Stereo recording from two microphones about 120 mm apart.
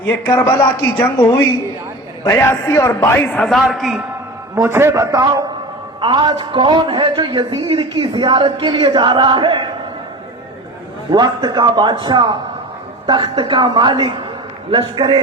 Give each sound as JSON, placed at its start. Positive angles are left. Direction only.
{"t": 0.0, "sound": "speech", "side_deg": 15}
{"t": 0.9, "sound": "speech", "side_deg": 40}
{"t": 2.2, "sound": "a man's voice", "side_deg": 20}
{"t": 3.5, "sound": "a man's voice", "side_deg": 0}
{"t": 4.5, "sound": "a man's voice", "side_deg": -20}
{"t": 7.6, "sound": "speech", "side_deg": -45}
{"t": 11.4, "sound": "a man's voice", "side_deg": -35}